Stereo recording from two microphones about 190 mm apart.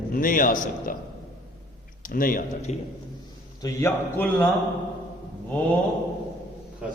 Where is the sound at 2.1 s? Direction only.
45° left (ahead or behind).